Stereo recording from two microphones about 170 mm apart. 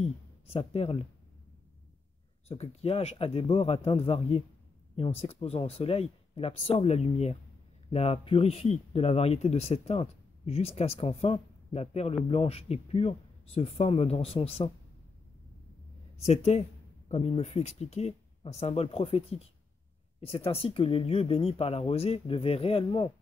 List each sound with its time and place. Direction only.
0.5 s a man's voice: 35° left (ahead or behind)
2.4 s a man's voice: 40° left (ahead or behind)
16.2 s a man's voice: 40° left (ahead or behind)